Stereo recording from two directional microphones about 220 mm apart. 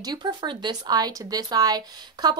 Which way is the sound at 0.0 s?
20° right (ahead or behind).